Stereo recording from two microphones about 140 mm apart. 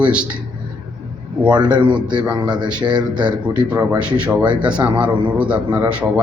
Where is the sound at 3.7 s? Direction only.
10° right (ahead or behind).